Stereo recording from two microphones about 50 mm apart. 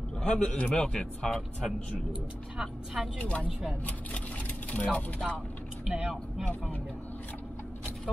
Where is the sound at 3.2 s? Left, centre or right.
Left.